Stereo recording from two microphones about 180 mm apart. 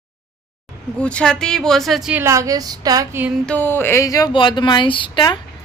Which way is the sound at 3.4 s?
10° left (ahead or behind).